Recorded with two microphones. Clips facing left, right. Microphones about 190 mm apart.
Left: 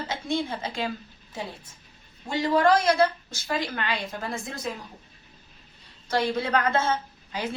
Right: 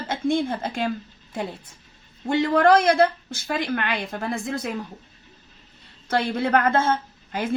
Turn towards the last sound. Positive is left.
turn(degrees=-50)  # may be behind; listen again after turning